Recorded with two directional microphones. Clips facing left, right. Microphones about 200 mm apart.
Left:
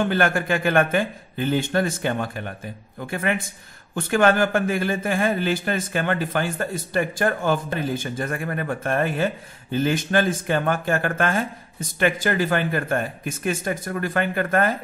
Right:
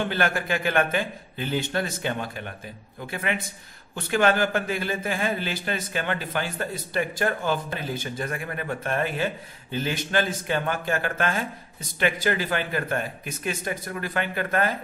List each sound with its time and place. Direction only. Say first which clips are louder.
0.1 s a man's voice: left 4 dB; 50° left (ahead or behind)